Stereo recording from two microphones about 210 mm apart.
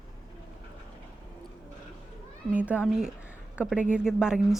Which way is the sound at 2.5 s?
5° right (ahead or behind).